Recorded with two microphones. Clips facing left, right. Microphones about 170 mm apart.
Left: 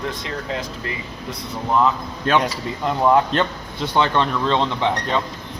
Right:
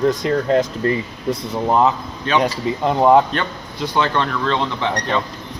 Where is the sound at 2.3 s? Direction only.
45° left (ahead or behind).